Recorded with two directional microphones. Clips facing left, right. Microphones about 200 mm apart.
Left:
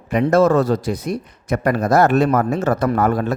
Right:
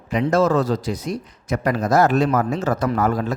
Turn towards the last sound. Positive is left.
turn(degrees=60)  # may be behind; listen again after turning